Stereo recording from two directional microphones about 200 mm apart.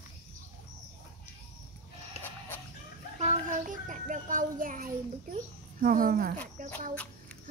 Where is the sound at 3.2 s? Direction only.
40° right (ahead or behind).